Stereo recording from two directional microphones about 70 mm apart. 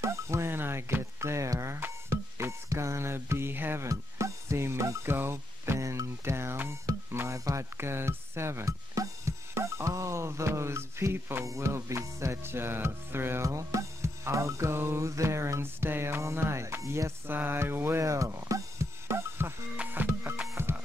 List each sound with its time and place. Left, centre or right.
0.0 s speech: right
3.8 s music: right
5.1 s speech: right
6.7 s music: right
7.3 s a sound: right
7.7 s music: right
17.3 s music: right